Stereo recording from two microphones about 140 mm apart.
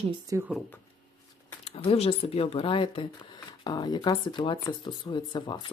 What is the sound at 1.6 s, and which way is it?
Speech, 40° left (ahead or behind).